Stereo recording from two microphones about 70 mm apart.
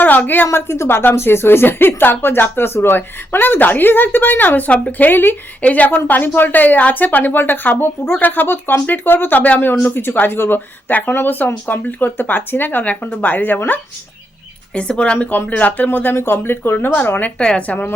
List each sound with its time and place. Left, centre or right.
0.0 s a sound: left
0.4 s a woman's voice: left
14.8 s a woman's voice: centre
17.3 s speech: centre